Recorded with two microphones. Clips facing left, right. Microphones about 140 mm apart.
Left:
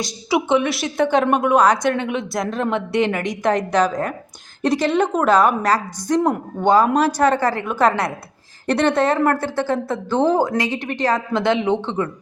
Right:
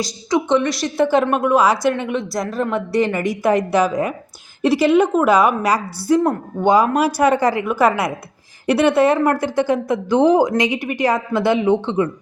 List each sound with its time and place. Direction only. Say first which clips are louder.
0.0 s a woman's voice: right 1 dB; 5° left (ahead or behind)
6.2 s speech: right 1 dB; 15° left (ahead or behind)
6.9 s speech: right 1 dB; 10° right (ahead or behind)